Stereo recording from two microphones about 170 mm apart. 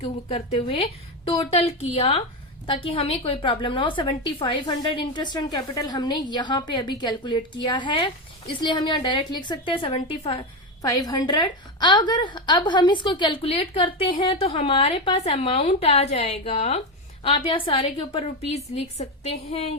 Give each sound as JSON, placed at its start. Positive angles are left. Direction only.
{"t": 0.0, "sound": "a woman's voice", "side_deg": 35}
{"t": 10.8, "sound": "a woman's voice", "side_deg": 20}